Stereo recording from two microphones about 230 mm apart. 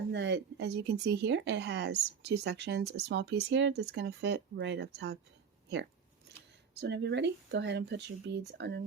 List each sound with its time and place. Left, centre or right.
0.1 s speech: right